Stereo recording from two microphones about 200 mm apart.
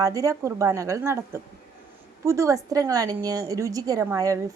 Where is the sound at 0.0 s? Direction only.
15° right (ahead or behind).